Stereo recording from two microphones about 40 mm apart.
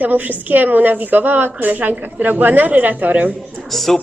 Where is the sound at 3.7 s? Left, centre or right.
Centre.